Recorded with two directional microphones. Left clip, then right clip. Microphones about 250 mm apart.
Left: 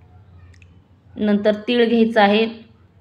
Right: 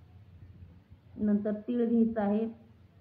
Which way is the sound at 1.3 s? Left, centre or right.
Left.